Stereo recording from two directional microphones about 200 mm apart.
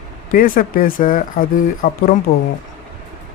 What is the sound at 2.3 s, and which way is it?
Speech, 35° left (ahead or behind).